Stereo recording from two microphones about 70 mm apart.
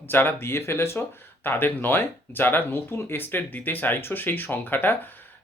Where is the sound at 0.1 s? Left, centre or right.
Left.